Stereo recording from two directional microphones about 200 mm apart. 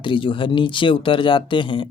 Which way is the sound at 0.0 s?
25° left (ahead or behind).